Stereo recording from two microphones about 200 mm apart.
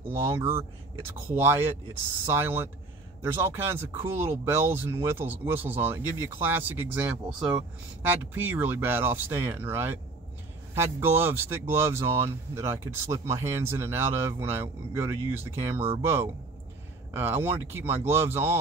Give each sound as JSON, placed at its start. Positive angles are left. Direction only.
{"t": 0.2, "sound": "speech", "side_deg": -10}